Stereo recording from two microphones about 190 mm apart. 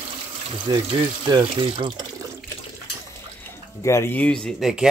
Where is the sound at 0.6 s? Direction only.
25° right (ahead or behind).